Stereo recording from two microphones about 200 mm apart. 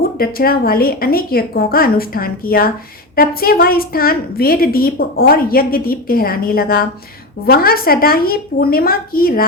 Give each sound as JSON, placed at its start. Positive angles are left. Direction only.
{"t": 0.2, "sound": "a woman's voice", "side_deg": 50}